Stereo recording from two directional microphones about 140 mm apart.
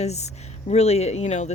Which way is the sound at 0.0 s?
50° left (ahead or behind).